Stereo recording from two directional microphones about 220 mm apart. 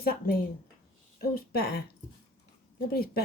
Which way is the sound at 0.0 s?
45° left (ahead or behind).